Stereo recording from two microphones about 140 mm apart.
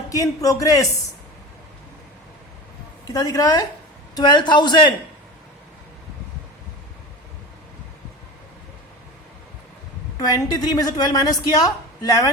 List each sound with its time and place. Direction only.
0.1 s a woman's voice: 25° left (ahead or behind)
3.1 s a woman's voice: 25° left (ahead or behind)
10.2 s a woman's voice: 30° left (ahead or behind)